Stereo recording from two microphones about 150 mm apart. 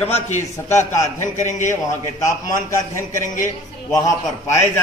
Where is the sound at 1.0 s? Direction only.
55° left (ahead or behind).